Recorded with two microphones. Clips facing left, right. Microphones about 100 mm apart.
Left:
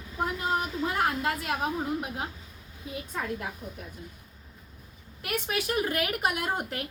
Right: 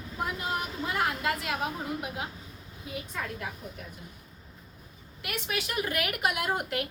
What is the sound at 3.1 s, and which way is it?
Speech, 35° left (ahead or behind).